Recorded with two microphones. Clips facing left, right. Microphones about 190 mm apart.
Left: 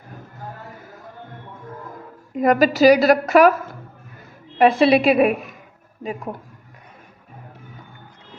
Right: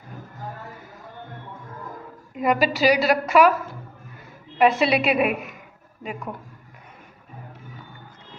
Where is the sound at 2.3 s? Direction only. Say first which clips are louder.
Left 5 dB; 45° left (ahead or behind).